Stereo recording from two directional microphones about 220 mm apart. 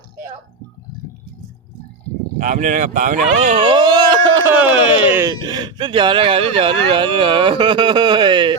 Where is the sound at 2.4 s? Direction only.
35° right (ahead or behind).